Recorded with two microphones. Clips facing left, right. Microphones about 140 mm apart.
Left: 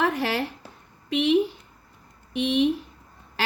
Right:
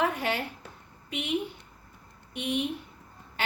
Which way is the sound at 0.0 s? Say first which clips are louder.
Left 4 dB; 90° left.